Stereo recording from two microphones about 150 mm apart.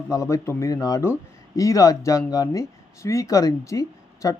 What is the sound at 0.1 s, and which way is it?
Speech, 20° left (ahead or behind).